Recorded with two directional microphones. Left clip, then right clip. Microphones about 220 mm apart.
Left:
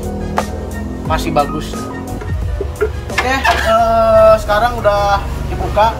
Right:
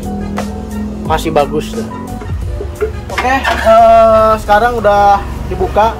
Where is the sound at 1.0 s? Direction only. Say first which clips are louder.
Right 3 dB; 40° right (ahead or behind).